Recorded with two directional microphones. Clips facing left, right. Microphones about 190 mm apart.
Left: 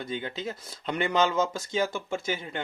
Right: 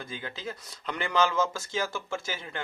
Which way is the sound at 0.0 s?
25° left (ahead or behind).